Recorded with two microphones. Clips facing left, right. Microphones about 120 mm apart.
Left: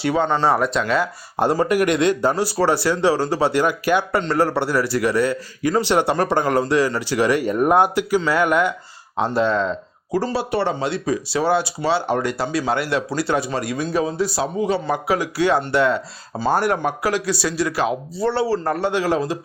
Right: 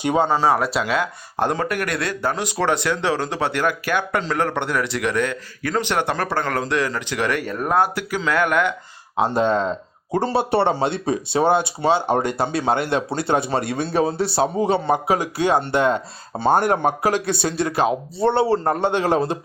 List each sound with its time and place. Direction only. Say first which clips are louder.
0.0 s speech: right 1 dB; 15° right (ahead or behind)
0.3 s speech: even; 5° right (ahead or behind)
1.4 s a man's voice: left 4 dB; 5° left (ahead or behind)
9.5 s speech: even; 40° right (ahead or behind)
10.1 s a man's voice: right 2 dB; 25° right (ahead or behind)
17.1 s speech: right 1 dB; 50° right (ahead or behind)
17.6 s a man's voice: right 3 dB; 25° right (ahead or behind)